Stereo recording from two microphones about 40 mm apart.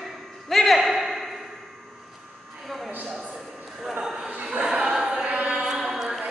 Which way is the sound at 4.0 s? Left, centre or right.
Centre.